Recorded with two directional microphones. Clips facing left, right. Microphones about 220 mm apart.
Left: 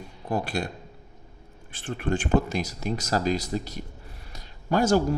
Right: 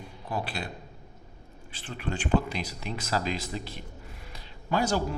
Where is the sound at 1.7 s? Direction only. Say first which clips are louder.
Left 7 dB; 50° left (ahead or behind).